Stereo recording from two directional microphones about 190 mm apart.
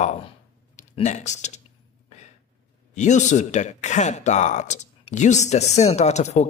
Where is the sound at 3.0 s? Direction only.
40° left (ahead or behind).